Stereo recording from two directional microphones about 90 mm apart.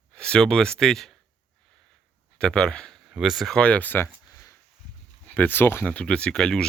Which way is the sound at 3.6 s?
15° left (ahead or behind).